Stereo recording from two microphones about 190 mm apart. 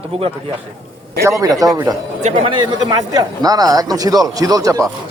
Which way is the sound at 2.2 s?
35° right (ahead or behind).